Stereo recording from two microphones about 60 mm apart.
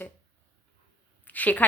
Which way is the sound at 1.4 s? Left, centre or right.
Left.